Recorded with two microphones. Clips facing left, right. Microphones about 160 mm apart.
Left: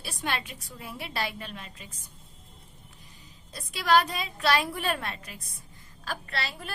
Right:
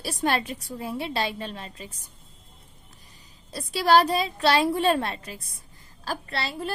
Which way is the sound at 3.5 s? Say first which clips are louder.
Right 4 dB; 35° right (ahead or behind).